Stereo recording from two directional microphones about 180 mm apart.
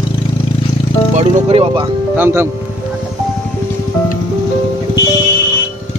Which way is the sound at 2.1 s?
10° right (ahead or behind).